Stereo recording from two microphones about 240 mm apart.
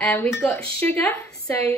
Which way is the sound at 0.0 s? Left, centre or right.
Centre.